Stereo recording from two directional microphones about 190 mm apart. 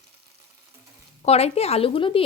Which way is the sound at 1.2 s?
30° left (ahead or behind).